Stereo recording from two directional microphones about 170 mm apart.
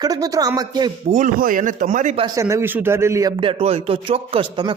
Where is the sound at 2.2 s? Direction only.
20° right (ahead or behind).